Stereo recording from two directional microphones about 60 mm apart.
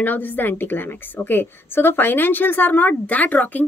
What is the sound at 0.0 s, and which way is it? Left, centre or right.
Speech, left.